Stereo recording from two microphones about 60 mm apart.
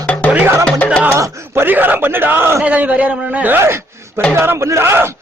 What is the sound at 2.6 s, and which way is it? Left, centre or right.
Speech, right.